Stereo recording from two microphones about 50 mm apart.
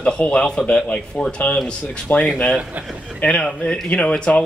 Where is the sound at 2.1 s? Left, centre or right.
Left.